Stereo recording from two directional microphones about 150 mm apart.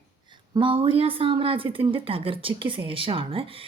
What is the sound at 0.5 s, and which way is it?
A woman's voice, 35° right (ahead or behind).